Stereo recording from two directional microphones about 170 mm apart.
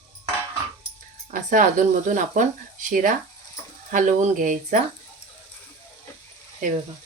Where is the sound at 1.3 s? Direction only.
50° right (ahead or behind).